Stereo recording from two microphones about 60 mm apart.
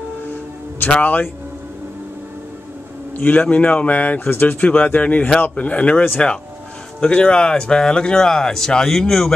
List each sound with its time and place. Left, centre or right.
1.0 s a man's voice: left
3.2 s speech: left; by 9.3 s centre